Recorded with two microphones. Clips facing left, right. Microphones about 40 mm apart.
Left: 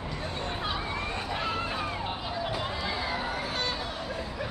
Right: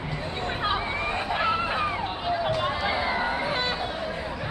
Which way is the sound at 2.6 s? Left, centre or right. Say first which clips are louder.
Right 6 dB; right.